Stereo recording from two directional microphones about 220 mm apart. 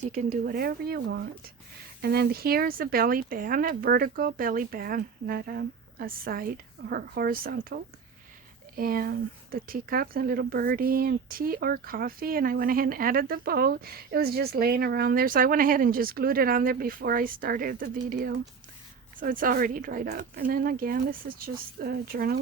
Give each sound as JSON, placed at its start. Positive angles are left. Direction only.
{"t": 0.1, "sound": "speech", "side_deg": -35}